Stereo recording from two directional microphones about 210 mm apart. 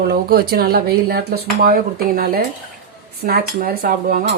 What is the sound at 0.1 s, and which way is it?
Speech, 45° right (ahead or behind).